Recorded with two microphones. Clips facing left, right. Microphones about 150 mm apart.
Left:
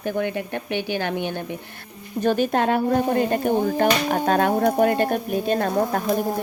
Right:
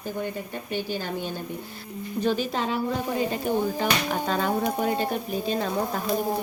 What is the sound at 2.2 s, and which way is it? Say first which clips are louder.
Speech: left 6 dB; 55° left (ahead or behind).